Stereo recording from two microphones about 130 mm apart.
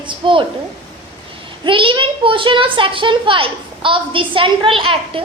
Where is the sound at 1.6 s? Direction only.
40° right (ahead or behind).